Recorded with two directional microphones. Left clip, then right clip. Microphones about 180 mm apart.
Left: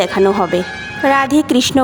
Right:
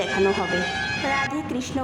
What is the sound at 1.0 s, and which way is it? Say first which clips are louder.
Speech: left 17 dB; 60° left (ahead or behind).